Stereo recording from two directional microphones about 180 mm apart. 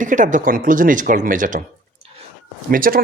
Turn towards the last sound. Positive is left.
turn(degrees=-50)  # may be behind; listen again after turning